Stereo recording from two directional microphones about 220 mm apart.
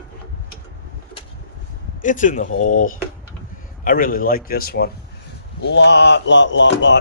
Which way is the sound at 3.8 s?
40° left (ahead or behind).